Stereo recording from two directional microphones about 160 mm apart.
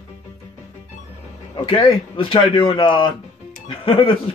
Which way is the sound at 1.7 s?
35° left (ahead or behind).